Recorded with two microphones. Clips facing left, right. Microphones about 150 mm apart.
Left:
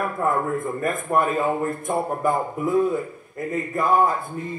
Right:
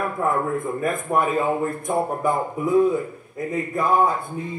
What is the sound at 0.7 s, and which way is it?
A man's voice, centre (ahead or behind).